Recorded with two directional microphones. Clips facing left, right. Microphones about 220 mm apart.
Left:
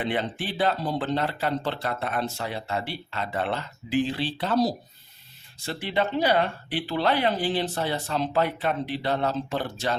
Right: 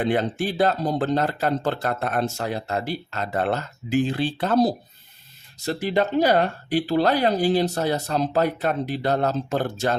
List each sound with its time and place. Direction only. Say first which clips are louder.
0.0 s speech: right 6 dB; 45° right (ahead or behind)